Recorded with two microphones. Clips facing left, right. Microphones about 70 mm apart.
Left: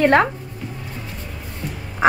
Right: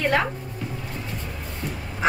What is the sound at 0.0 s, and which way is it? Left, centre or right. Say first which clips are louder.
Speech: left 7 dB; left.